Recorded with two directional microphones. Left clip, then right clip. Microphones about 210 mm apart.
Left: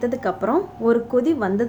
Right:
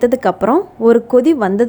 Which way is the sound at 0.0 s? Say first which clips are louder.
Right 9 dB; 40° right (ahead or behind).